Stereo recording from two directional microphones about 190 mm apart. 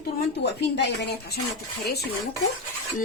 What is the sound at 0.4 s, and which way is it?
Speech, 65° left (ahead or behind).